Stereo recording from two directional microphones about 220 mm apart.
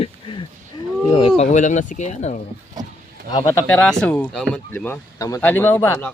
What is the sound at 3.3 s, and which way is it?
Speech, 15° left (ahead or behind).